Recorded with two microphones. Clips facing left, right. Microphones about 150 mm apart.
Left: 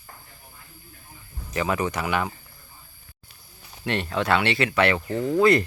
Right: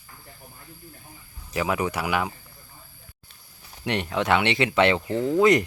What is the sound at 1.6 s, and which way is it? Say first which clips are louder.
Speech: even; 10° right (ahead or behind).